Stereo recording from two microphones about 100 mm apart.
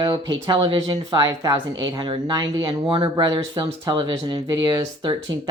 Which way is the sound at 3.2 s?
50° right (ahead or behind).